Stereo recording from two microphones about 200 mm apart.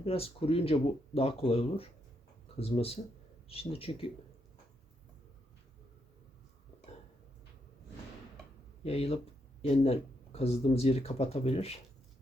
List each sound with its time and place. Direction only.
0.0 s speech: 30° left (ahead or behind)
8.8 s speech: 30° left (ahead or behind)